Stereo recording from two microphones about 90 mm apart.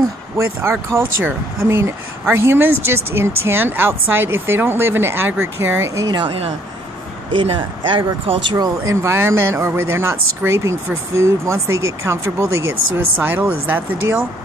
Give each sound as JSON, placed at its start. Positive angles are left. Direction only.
{"t": 0.6, "sound": "speech", "side_deg": -25}
{"t": 6.0, "sound": "speech", "side_deg": -65}
{"t": 7.3, "sound": "speech", "side_deg": -70}
{"t": 9.0, "sound": "speech", "side_deg": -30}